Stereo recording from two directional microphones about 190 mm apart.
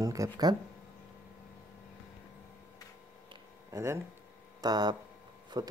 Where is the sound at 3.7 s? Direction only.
15° right (ahead or behind).